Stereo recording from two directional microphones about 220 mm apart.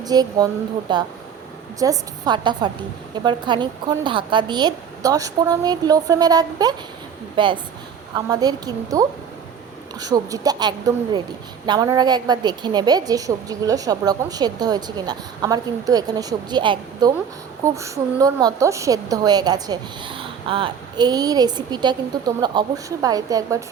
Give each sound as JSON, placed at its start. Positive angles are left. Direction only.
{"t": 0.0, "sound": "a woman's voice", "side_deg": -15}